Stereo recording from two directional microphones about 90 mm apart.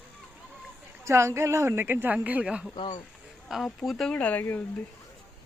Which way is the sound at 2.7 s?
60° left (ahead or behind).